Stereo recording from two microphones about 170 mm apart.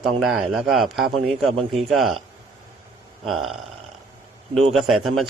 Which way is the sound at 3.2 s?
Centre (ahead or behind).